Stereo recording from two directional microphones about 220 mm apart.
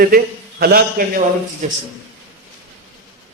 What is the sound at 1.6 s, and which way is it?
Speech, 35° right (ahead or behind).